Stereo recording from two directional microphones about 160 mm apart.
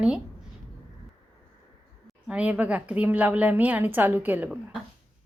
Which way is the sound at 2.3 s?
10° right (ahead or behind).